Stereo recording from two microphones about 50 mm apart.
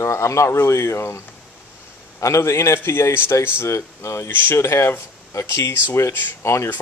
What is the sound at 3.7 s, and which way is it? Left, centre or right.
Speech, left.